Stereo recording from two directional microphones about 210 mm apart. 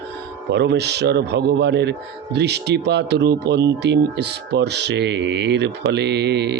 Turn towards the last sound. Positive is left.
turn(degrees=-55)  # may be behind; listen again after turning